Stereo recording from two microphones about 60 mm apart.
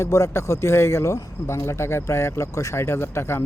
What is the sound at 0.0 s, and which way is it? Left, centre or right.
Speech, left.